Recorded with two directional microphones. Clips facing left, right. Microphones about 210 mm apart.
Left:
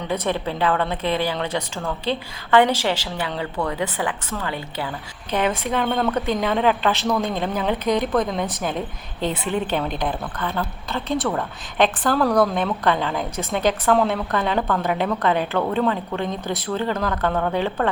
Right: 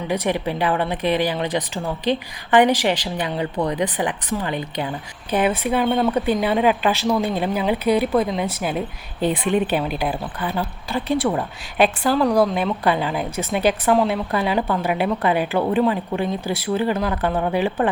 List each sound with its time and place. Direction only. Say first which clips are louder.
0.1 s a woman's voice: right 2 dB; 15° right (ahead or behind)
9.5 s a woman's voice: right 2 dB; 15° right (ahead or behind)